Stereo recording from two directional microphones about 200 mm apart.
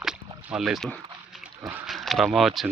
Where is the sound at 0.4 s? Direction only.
Centre (ahead or behind).